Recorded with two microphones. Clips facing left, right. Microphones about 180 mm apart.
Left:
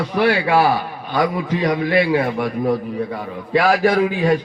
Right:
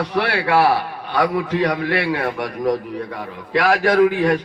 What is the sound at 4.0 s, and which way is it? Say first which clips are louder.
Speech: right 3 dB; 65° right (ahead or behind).